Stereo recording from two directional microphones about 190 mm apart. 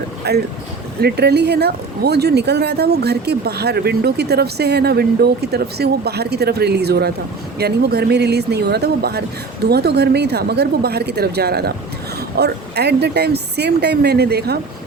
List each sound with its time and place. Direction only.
0.2 s speech: 60° right (ahead or behind)